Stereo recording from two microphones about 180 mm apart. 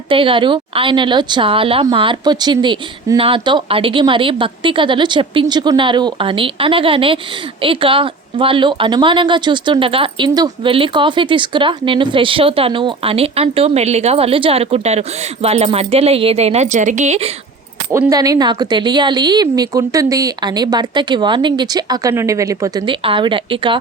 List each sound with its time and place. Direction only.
0.1 s speech: 30° right (ahead or behind)
17.9 s speech: 15° right (ahead or behind)